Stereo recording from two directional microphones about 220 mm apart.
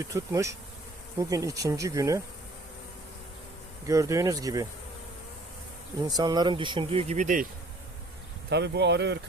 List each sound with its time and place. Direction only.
0.0 s speech: 15° right (ahead or behind)
3.8 s speech: 15° right (ahead or behind)
6.1 s speech: 20° right (ahead or behind); by 7.4 s 35° right (ahead or behind)
8.4 s speech: 50° right (ahead or behind)